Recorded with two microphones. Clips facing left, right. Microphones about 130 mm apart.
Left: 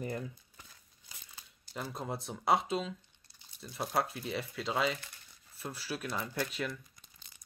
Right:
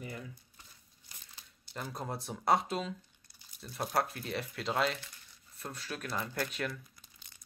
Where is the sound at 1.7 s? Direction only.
Centre (ahead or behind).